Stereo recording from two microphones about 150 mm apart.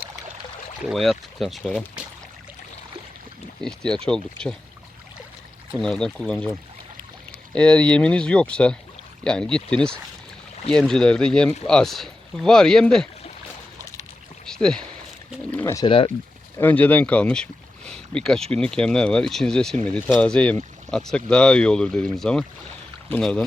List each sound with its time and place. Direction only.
0.9 s speech: centre (ahead or behind)
3.6 s speech: 5° left (ahead or behind)
5.8 s speech: 5° left (ahead or behind)
7.5 s speech: 5° left (ahead or behind)
14.4 s rowboat: 5° left (ahead or behind)
15.5 s speech: 20° left (ahead or behind)
15.9 s speech: 35° left (ahead or behind)
16.6 s speech: 10° left (ahead or behind)